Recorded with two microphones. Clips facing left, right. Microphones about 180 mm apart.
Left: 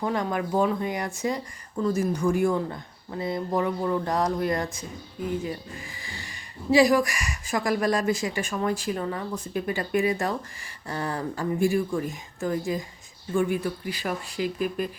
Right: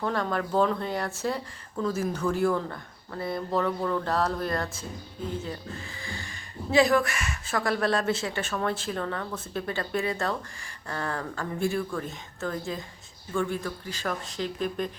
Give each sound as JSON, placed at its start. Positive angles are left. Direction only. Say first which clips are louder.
{"t": 0.0, "sound": "speech", "louder": "left 1 dB", "side_deg": 15}